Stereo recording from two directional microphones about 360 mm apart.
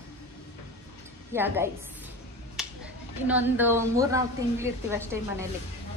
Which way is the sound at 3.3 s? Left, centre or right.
Centre.